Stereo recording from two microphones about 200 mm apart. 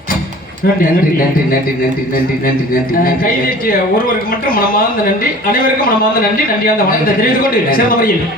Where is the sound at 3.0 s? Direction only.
45° left (ahead or behind).